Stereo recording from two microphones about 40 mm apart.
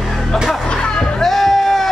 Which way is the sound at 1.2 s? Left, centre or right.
Centre.